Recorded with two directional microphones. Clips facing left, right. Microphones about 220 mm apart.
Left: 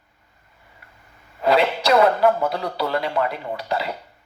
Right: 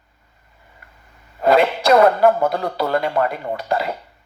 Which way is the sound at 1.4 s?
50° right (ahead or behind).